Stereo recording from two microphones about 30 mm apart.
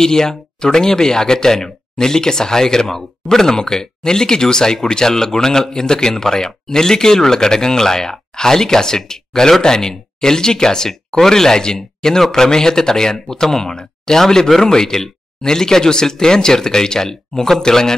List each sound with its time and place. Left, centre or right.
0.0 s a man's voice: centre